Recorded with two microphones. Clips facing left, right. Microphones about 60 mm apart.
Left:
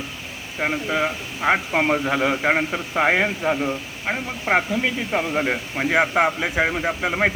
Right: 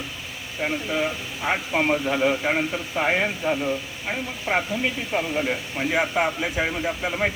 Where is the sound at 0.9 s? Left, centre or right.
Left.